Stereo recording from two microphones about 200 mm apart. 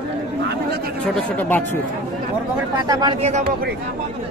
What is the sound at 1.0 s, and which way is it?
Speech, 5° left (ahead or behind).